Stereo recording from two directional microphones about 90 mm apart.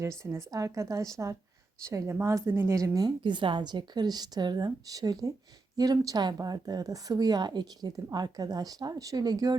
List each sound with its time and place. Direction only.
0.0 s a woman's voice: 35° right (ahead or behind)
3.2 s speech: 60° right (ahead or behind)